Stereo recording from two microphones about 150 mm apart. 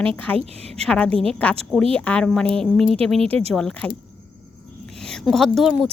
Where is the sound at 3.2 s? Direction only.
40° right (ahead or behind).